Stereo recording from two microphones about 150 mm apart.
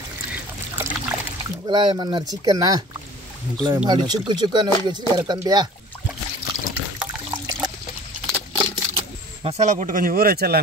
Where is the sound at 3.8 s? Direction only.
30° right (ahead or behind).